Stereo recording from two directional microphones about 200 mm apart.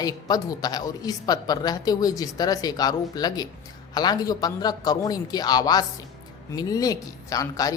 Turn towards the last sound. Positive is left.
turn(degrees=15)  # may be behind; listen again after turning